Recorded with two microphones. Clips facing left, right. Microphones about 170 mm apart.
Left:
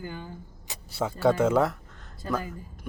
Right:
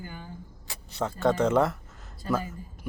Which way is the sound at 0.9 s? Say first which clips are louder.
Left 2 dB; 10° left (ahead or behind).